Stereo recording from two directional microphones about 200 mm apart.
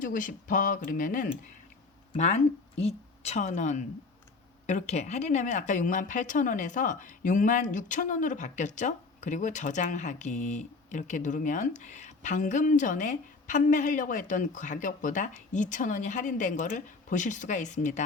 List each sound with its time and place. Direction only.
0.0 s a woman's voice: 40° left (ahead or behind)